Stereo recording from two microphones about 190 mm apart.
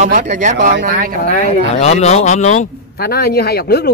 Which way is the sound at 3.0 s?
55° left (ahead or behind).